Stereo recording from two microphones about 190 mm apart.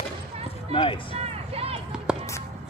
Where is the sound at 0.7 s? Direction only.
25° left (ahead or behind).